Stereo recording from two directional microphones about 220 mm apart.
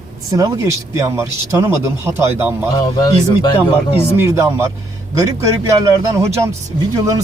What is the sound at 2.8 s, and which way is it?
Speech, 20° left (ahead or behind).